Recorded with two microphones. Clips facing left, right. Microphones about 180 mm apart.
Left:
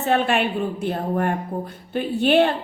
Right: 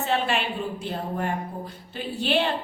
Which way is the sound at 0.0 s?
55° left (ahead or behind).